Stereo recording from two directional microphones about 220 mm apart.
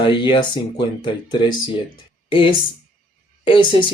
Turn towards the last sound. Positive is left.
turn(degrees=20)  # may be behind; listen again after turning